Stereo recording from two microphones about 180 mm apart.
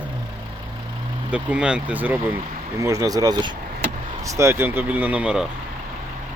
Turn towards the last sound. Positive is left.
turn(degrees=-5)  # may be behind; listen again after turning